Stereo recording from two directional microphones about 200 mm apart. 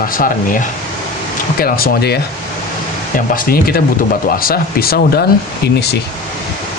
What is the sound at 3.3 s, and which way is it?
Speech, 45° left (ahead or behind).